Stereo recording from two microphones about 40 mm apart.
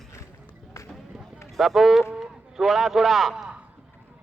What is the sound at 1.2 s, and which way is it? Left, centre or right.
Run, centre.